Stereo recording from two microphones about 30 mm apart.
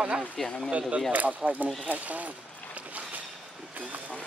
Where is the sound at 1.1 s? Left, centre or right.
Right.